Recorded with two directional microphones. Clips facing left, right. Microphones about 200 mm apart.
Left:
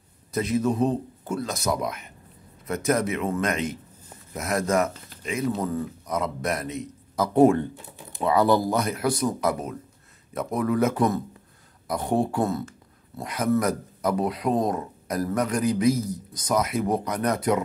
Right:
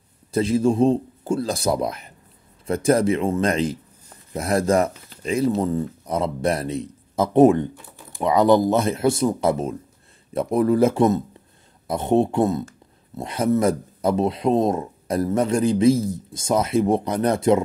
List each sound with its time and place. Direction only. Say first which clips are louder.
0.3 s speech: right 5 dB; 30° right (ahead or behind)
7.3 s speech: right 3 dB; 20° right (ahead or behind)